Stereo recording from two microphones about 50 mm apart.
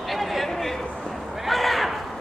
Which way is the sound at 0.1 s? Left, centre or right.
Centre.